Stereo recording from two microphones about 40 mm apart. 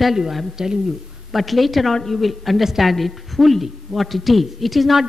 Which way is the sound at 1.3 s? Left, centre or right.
Centre.